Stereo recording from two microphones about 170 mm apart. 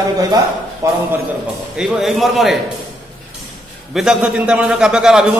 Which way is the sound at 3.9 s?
5° right (ahead or behind).